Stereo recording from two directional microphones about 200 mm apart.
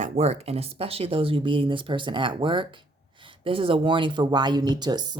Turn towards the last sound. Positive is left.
turn(degrees=-20)  # may be behind; listen again after turning